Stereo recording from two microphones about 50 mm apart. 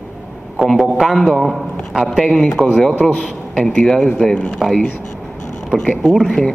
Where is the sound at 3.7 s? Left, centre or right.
Centre.